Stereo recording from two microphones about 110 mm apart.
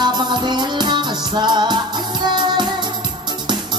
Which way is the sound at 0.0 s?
45° right (ahead or behind).